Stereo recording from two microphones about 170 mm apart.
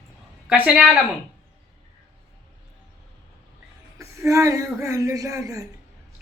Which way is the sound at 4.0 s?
15° right (ahead or behind).